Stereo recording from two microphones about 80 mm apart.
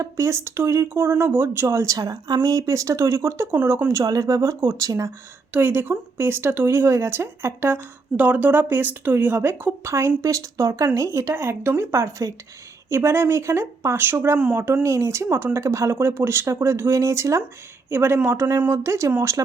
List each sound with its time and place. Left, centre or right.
0.0 s speech: right
4.0 s speech: right
5.5 s speech: right